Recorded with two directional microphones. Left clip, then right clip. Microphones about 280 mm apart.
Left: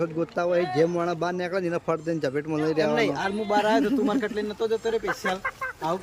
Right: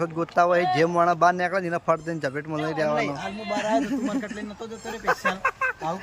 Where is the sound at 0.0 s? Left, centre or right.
Centre.